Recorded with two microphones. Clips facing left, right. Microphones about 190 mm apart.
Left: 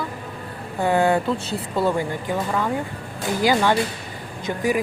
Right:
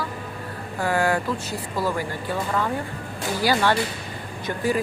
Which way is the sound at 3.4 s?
20° left (ahead or behind).